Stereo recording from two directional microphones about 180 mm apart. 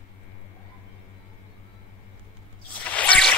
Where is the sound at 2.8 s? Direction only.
10° left (ahead or behind).